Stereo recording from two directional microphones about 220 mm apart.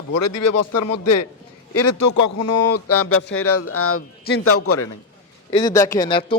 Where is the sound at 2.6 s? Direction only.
90° left.